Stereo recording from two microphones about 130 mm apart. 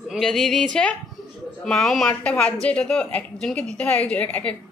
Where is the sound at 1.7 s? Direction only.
5° left (ahead or behind).